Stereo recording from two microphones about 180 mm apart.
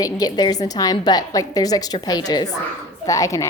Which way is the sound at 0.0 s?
20° left (ahead or behind).